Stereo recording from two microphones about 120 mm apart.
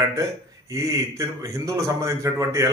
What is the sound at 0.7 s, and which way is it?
A man's voice, 25° right (ahead or behind).